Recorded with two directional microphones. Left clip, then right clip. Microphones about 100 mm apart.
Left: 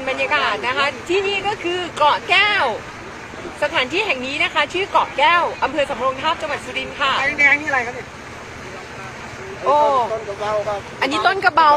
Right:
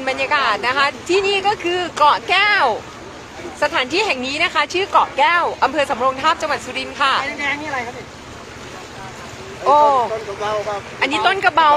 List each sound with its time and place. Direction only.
0.0 s speech: 30° right (ahead or behind)
9.7 s speech: 30° right (ahead or behind)
10.4 s speech: centre (ahead or behind)